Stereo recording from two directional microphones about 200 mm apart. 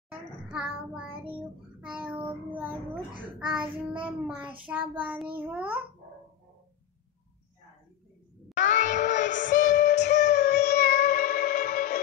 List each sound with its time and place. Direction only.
0.5 s a child's voice: 5° right (ahead or behind)
1.8 s child singing: 5° right (ahead or behind)
2.5 s a child's voice: 5° right (ahead or behind)
4.6 s child singing: 10° right (ahead or behind)
8.5 s child singing: 40° left (ahead or behind)
8.9 s music: 40° left (ahead or behind)